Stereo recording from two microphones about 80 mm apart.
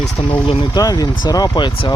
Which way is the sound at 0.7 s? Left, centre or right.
Left.